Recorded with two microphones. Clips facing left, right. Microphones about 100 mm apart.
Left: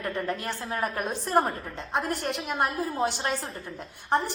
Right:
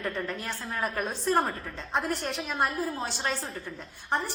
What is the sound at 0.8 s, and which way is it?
A woman's voice, 15° left (ahead or behind).